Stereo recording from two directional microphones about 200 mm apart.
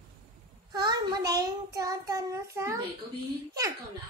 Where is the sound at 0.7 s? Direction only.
20° right (ahead or behind).